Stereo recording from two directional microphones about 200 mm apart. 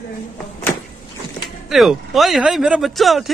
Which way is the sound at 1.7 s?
Centre (ahead or behind).